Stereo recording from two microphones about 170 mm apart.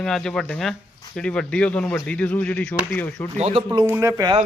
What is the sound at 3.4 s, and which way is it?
Speech, 35° right (ahead or behind).